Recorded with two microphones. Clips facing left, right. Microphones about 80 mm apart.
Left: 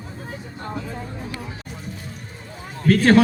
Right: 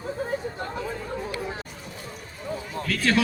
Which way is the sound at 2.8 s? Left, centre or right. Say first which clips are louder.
Left 10 dB; left.